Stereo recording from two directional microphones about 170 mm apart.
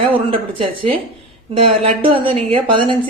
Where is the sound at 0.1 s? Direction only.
30° right (ahead or behind).